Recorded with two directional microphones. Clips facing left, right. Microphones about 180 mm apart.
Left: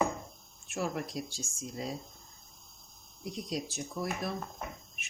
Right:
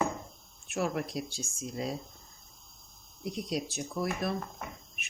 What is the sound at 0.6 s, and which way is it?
Speech, 65° right (ahead or behind).